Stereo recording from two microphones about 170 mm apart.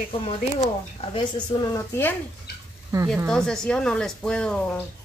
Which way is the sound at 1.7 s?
15° left (ahead or behind).